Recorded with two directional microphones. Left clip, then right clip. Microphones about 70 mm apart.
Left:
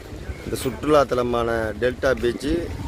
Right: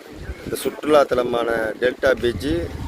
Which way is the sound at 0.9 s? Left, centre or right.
Centre.